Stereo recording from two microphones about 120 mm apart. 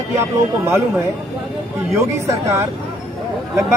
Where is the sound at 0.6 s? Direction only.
20° right (ahead or behind).